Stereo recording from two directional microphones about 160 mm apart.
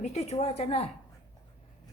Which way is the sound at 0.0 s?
45° left (ahead or behind).